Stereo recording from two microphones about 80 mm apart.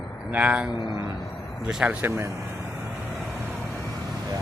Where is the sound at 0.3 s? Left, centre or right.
Centre.